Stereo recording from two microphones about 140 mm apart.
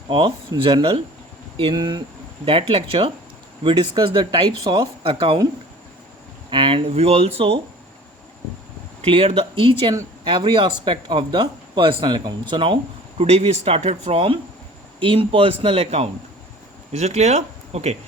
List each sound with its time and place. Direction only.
0.1 s speech: 35° right (ahead or behind)
6.5 s speech: 35° right (ahead or behind)
9.0 s speech: 45° right (ahead or behind)